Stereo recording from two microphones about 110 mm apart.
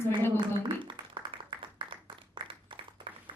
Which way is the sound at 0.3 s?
45° right (ahead or behind).